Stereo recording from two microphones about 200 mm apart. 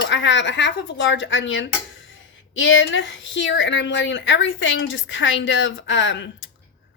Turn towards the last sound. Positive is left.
turn(degrees=70)  # may be behind; listen again after turning